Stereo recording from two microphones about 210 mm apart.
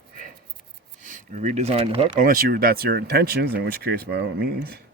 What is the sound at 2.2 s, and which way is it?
Speech, 40° right (ahead or behind).